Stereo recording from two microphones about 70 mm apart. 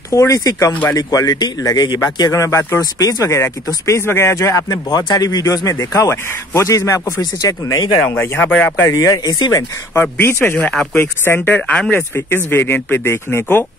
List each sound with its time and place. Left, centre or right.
0.1 s a man's voice: left
2.0 s a man's voice: left
2.3 s speech: left
2.8 s a man's voice: left
4.9 s speech: left
7.2 s speech: left
8.0 s speech: left
8.5 s speech: left
8.8 s speech: left
9.1 s speech: left
10.1 s speech: left
10.7 s speech: centre
11.0 s speech: left
11.9 s speech: left